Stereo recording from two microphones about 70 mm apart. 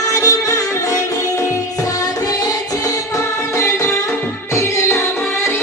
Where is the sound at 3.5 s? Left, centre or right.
Left.